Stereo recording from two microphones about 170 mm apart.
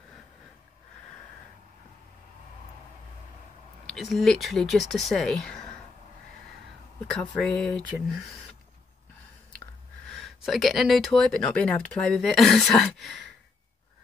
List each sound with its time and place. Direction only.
3.8 s speech: centre (ahead or behind)
7.1 s speech: 5° left (ahead or behind)
10.0 s speech: centre (ahead or behind)